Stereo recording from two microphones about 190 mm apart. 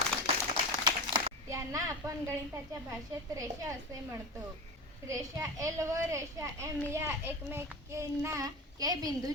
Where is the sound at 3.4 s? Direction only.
15° right (ahead or behind).